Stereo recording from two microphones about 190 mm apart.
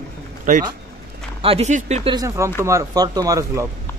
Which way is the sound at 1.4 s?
30° right (ahead or behind).